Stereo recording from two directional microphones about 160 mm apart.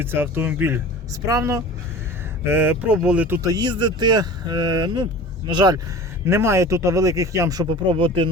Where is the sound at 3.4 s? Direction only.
25° right (ahead or behind).